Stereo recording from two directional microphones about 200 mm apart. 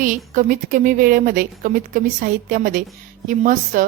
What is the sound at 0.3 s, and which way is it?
A woman's voice, 40° right (ahead or behind).